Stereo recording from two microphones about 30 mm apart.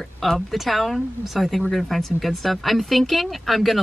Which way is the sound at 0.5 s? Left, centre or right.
Centre.